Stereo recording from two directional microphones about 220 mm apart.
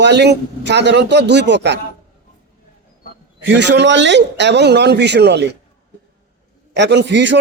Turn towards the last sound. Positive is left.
turn(degrees=-55)  # may be behind; listen again after turning